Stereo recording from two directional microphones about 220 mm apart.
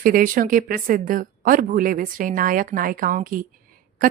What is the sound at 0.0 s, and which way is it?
Speech, 40° right (ahead or behind).